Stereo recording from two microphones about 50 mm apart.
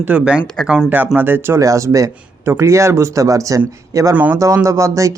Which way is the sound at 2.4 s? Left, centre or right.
Right.